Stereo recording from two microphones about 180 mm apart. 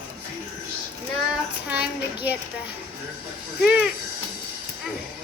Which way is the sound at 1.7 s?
5° right (ahead or behind).